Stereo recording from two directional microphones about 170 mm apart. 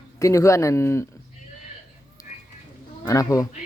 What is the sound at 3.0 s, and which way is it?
Speech, 20° left (ahead or behind).